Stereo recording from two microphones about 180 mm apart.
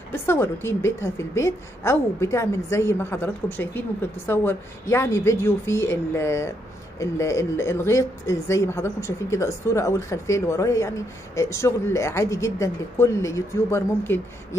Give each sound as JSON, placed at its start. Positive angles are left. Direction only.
{"t": 0.1, "sound": "speech", "side_deg": 15}